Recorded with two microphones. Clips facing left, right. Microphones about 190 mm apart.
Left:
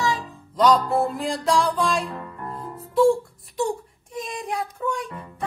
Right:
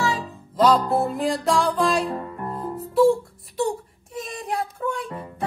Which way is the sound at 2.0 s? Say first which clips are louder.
Right 5 dB; 35° right (ahead or behind).